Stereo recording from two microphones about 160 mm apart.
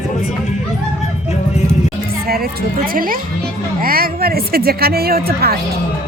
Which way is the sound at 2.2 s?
70° right (ahead or behind).